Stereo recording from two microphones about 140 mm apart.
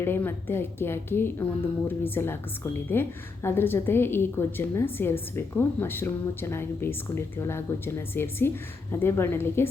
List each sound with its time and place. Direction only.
0.0 s a woman's voice: 15° left (ahead or behind)